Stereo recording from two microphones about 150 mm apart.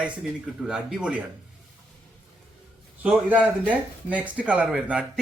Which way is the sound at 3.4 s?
10° right (ahead or behind).